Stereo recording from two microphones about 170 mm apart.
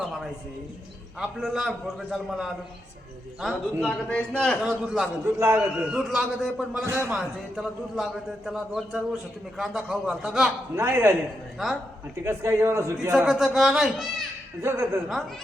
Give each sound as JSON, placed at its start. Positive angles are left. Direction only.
{"t": 0.0, "sound": "a sound", "side_deg": 0}
{"t": 1.2, "sound": "a man's voice", "side_deg": 0}
{"t": 6.8, "sound": "a man's voice", "side_deg": -15}
{"t": 7.1, "sound": "a man's voice", "side_deg": -5}
{"t": 10.8, "sound": "a man's voice", "side_deg": -15}
{"t": 12.2, "sound": "a man's voice", "side_deg": -15}
{"t": 13.1, "sound": "a man's voice", "side_deg": -5}
{"t": 14.6, "sound": "a man's voice", "side_deg": -15}